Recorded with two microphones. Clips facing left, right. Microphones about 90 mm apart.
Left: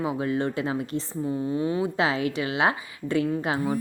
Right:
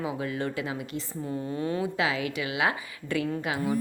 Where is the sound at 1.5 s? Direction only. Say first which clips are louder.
Left 2 dB; 15° left (ahead or behind).